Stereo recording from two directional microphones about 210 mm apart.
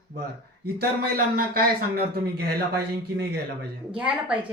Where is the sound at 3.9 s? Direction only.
5° right (ahead or behind).